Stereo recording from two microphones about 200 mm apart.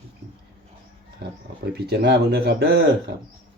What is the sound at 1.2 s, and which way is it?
Speech, 50° right (ahead or behind).